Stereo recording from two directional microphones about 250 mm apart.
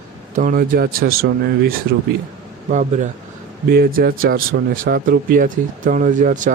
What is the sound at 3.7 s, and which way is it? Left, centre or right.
Speech, right.